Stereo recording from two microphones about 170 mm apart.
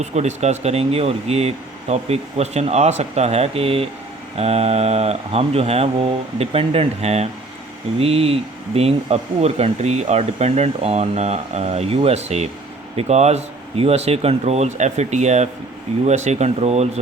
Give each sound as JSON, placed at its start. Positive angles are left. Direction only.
{"t": 0.0, "sound": "speech", "side_deg": -40}